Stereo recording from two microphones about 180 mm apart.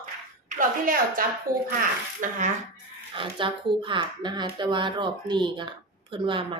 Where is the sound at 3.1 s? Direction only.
25° right (ahead or behind).